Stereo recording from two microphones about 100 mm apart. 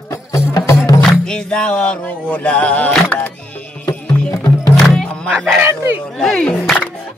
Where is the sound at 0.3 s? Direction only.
30° left (ahead or behind).